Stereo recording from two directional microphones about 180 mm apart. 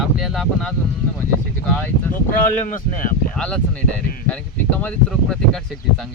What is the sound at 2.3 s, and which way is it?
Speech, 45° left (ahead or behind).